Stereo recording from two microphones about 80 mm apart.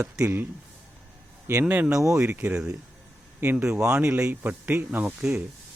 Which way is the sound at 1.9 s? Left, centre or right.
Right.